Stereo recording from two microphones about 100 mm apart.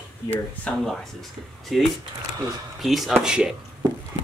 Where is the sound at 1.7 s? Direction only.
Centre (ahead or behind).